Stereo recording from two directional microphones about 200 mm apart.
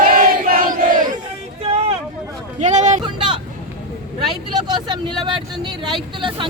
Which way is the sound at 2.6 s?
35° right (ahead or behind).